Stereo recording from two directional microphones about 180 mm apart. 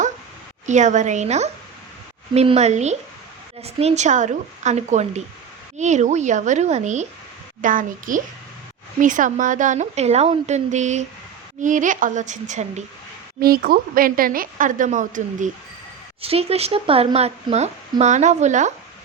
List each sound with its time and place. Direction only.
0.7 s a woman's voice: 40° right (ahead or behind)
13.4 s speech: 55° right (ahead or behind)
16.2 s a woman's voice: 35° right (ahead or behind)